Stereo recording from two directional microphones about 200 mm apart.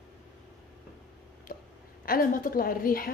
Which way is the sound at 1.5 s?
45° left (ahead or behind).